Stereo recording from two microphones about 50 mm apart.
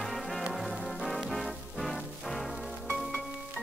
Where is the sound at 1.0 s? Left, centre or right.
Centre.